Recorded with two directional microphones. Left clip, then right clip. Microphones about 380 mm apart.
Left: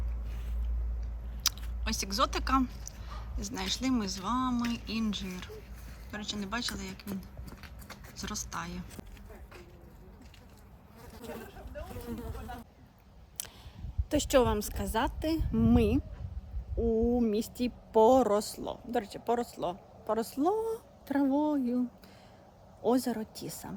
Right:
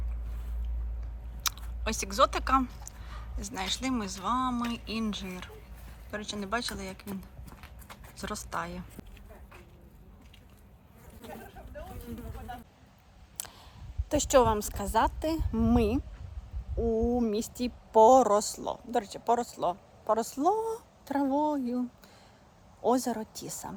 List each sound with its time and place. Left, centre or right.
1.5 s speech: centre
7.5 s clip-clop: centre
8.1 s speech: centre
14.1 s speech: centre